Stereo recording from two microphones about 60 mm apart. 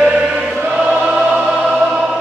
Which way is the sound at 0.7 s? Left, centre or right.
Centre.